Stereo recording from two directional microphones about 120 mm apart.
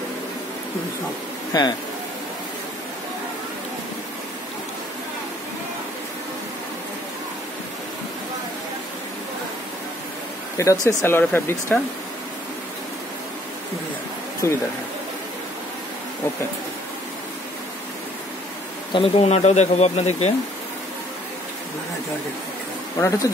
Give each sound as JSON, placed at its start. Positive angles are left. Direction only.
{"t": 1.5, "sound": "speech", "side_deg": 35}
{"t": 10.6, "sound": "speech", "side_deg": 25}
{"t": 18.9, "sound": "speech", "side_deg": 55}
{"t": 22.9, "sound": "speech", "side_deg": 25}